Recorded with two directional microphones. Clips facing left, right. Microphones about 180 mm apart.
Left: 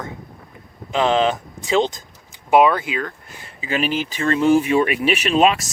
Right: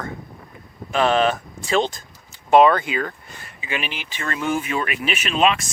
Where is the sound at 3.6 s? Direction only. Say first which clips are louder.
Left 8 dB; 40° left (ahead or behind).